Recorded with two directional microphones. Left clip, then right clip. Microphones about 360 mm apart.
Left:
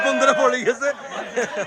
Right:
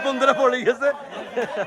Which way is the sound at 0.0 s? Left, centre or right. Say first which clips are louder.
Left 2 dB; centre.